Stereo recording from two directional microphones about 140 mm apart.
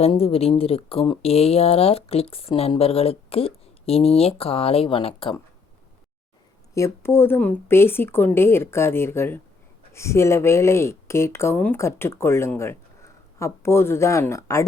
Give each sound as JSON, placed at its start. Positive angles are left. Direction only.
{"t": 0.0, "sound": "speech", "side_deg": 45}
{"t": 6.7, "sound": "a woman's voice", "side_deg": 20}